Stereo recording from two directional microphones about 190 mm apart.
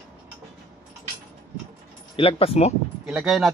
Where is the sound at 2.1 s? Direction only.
30° left (ahead or behind).